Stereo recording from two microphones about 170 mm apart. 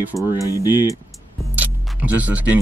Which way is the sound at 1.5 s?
10° right (ahead or behind).